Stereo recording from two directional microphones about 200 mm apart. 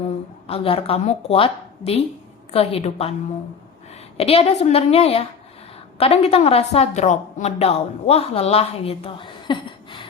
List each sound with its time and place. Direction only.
0.4 s a woman's voice: 30° left (ahead or behind)
4.2 s a woman's voice: 30° left (ahead or behind)